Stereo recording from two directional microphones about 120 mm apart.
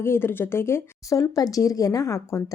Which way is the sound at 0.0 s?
20° left (ahead or behind).